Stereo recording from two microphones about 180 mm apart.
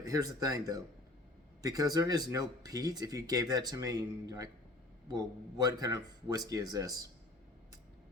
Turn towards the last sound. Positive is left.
turn(degrees=-20)  # may be behind; listen again after turning